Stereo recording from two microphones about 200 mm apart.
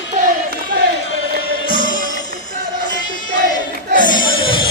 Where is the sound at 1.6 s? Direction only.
45° left (ahead or behind).